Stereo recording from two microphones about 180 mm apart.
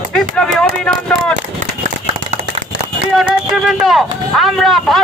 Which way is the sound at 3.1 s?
Centre (ahead or behind).